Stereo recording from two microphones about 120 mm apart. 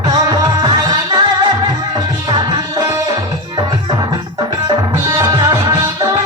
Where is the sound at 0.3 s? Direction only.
30° right (ahead or behind).